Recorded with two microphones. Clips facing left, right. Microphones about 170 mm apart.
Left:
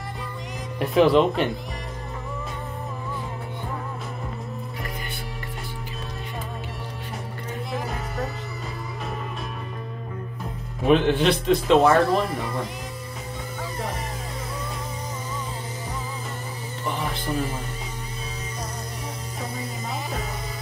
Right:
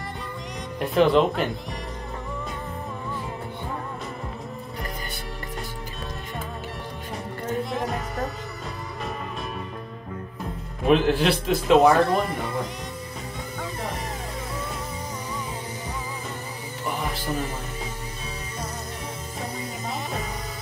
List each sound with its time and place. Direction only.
0.7 s a man's voice: centre (ahead or behind)
10.9 s a man's voice: centre (ahead or behind)